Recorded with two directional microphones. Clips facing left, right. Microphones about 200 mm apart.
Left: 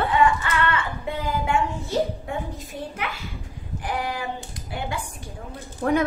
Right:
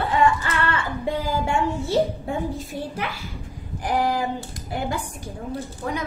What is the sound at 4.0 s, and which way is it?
Hands, 40° right (ahead or behind).